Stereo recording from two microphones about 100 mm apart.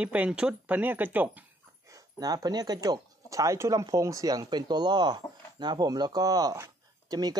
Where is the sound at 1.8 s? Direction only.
40° right (ahead or behind).